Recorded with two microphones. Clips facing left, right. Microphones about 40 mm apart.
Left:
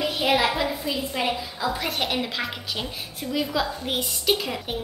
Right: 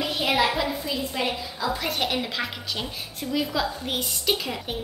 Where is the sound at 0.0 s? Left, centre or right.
Centre.